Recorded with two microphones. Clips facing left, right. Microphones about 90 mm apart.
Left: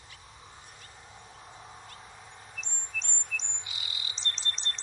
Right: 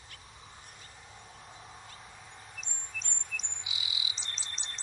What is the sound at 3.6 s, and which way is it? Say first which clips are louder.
Bird: right 1 dB; 5° right (ahead or behind).